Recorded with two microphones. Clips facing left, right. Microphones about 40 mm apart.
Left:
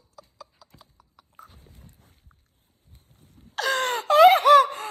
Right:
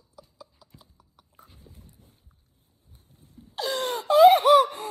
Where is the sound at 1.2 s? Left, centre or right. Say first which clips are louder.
Left 4 dB; left.